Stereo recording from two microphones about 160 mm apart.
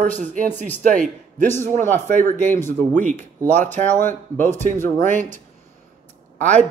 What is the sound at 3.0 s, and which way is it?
Speech, 50° right (ahead or behind).